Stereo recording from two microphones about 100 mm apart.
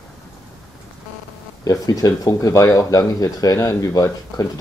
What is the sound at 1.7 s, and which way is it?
Speech, 35° left (ahead or behind).